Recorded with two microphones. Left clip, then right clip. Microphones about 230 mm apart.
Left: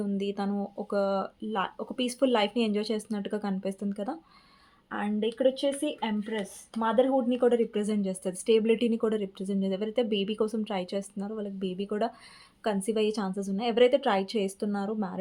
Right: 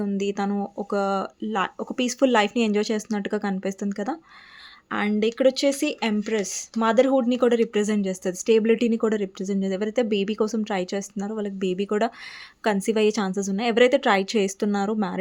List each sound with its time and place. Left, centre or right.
0.0 s speech: right
4.9 s speech: right